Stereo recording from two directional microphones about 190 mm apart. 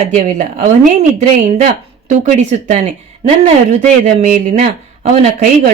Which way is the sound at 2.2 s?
40° right (ahead or behind).